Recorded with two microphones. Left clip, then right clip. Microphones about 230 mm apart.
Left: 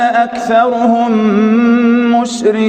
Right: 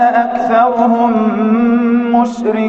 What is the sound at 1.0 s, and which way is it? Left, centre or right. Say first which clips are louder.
Music: left 1 dB; left.